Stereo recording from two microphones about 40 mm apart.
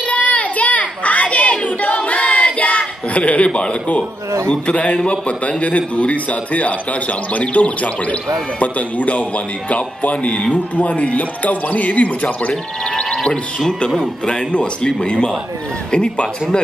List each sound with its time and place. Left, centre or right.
0.1 s child singing: left
4.5 s a man's voice: left
12.9 s music: left
14.2 s a man's voice: left